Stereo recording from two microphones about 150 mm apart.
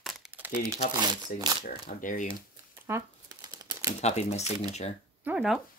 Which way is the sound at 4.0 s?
50° left (ahead or behind).